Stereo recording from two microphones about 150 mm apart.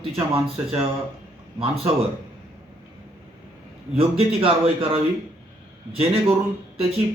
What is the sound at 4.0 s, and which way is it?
Speech, 40° right (ahead or behind).